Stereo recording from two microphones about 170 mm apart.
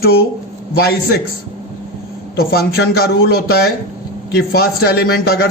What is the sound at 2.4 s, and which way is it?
A man's voice, 65° left (ahead or behind).